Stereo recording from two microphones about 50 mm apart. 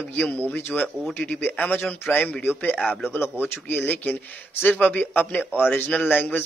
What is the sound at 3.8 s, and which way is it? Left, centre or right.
A man's voice, left.